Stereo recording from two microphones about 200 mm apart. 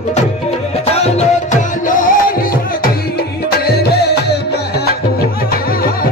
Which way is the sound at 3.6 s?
55° left (ahead or behind).